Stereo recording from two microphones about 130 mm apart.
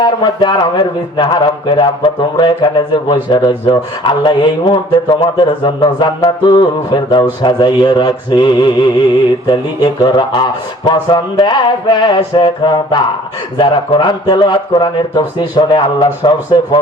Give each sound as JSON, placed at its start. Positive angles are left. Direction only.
{"t": 0.0, "sound": "speech", "side_deg": 35}